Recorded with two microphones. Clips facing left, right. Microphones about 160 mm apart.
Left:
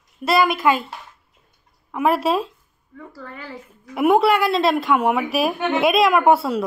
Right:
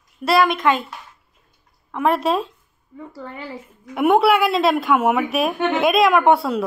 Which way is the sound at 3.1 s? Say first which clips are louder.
Right 3 dB; 25° right (ahead or behind).